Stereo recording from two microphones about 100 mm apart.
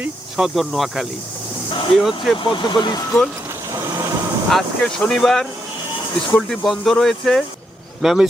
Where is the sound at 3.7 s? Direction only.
35° right (ahead or behind).